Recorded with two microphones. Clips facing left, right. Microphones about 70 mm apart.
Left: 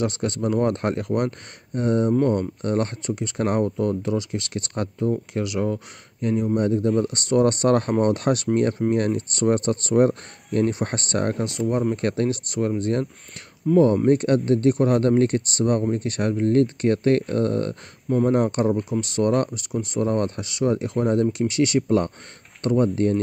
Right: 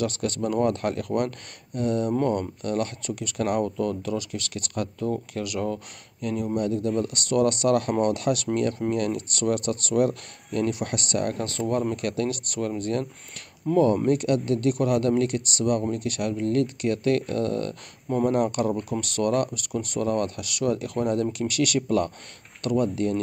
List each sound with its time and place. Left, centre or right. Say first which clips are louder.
0.0 s speech: left 2 dB; left
13.7 s speech: left 4 dB; centre
14.0 s speech: left 4 dB; left